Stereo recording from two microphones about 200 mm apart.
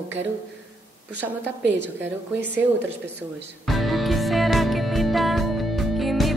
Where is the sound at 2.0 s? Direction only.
60° right (ahead or behind).